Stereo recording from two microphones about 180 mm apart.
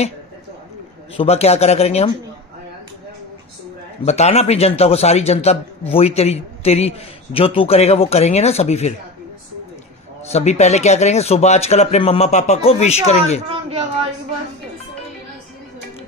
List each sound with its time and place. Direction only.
1.1 s a man's voice: 35° left (ahead or behind)
4.0 s a man's voice: 35° left (ahead or behind)
10.3 s a man's voice: 40° left (ahead or behind)